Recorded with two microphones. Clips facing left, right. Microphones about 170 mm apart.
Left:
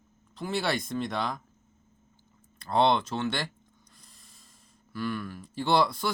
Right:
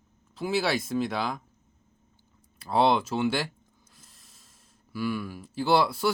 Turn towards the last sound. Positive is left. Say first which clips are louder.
# right 2 dB
turn(degrees=-5)  # may be behind; listen again after turning